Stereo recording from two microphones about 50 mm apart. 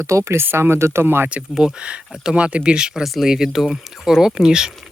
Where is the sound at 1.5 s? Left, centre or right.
Centre.